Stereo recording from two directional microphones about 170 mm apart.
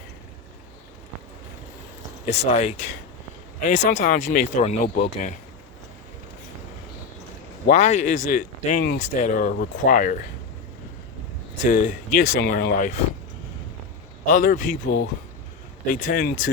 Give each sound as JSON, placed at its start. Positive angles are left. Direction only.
{"t": 2.2, "sound": "speech", "side_deg": 40}
{"t": 3.8, "sound": "speech", "side_deg": 50}
{"t": 7.7, "sound": "speech", "side_deg": 45}
{"t": 11.6, "sound": "speech", "side_deg": 50}
{"t": 14.3, "sound": "speech", "side_deg": 50}